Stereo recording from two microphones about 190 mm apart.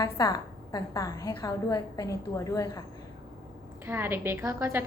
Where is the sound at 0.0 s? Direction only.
15° left (ahead or behind).